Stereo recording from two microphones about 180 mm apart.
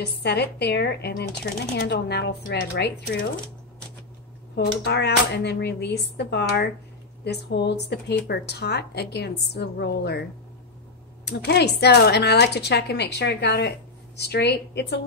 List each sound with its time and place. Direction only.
0.0 s speech: 65° left (ahead or behind)
4.6 s speech: 70° left (ahead or behind)
11.2 s speech: 65° left (ahead or behind)